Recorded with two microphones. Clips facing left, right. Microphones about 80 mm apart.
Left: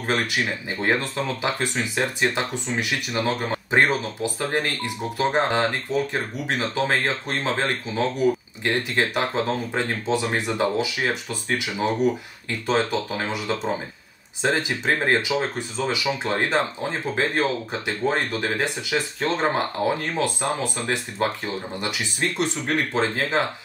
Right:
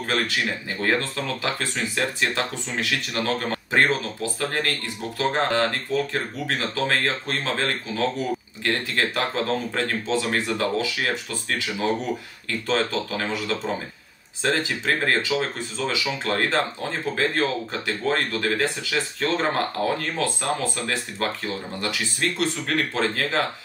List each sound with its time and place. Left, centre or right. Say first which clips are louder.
0.0 s speech: left 1 dB; left